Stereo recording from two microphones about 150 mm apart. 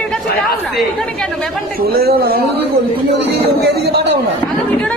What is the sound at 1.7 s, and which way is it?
Speech, 90° right.